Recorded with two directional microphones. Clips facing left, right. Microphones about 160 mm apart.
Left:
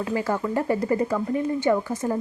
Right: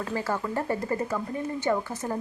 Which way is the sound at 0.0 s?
15° left (ahead or behind).